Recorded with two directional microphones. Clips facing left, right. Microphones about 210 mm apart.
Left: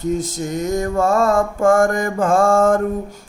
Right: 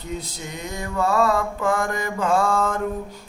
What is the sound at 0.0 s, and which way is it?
Music, 45° left (ahead or behind).